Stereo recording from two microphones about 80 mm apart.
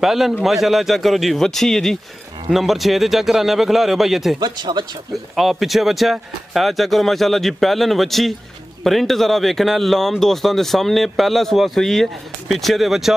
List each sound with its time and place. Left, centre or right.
0.0 s speech: centre
4.4 s speech: right
5.1 s speech: centre